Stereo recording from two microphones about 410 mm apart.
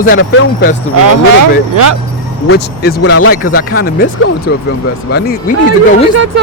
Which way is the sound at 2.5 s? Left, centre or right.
Left.